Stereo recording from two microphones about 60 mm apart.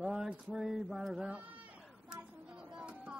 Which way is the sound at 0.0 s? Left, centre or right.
Centre.